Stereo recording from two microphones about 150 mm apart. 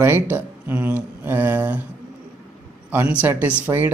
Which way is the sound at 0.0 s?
15° right (ahead or behind).